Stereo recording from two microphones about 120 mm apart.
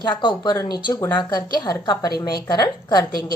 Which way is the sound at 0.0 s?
40° left (ahead or behind).